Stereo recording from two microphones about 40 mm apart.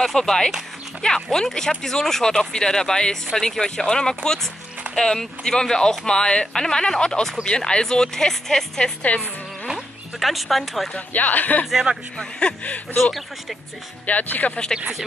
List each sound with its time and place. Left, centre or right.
0.0 s speech: centre
9.7 s speech: centre
10.9 s speech: left
11.6 s speech: centre
12.9 s speech: centre
14.0 s speech: left